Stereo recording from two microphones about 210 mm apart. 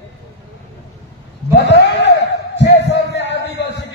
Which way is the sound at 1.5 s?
55° left (ahead or behind).